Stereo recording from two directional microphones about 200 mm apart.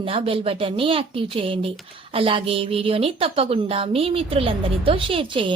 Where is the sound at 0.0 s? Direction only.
25° right (ahead or behind).